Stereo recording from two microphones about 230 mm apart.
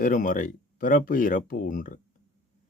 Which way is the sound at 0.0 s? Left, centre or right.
Left.